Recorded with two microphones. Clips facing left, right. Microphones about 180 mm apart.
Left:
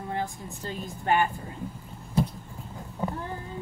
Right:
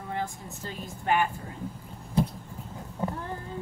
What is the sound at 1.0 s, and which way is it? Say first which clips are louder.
Speech: left 1 dB; 30° left (ahead or behind).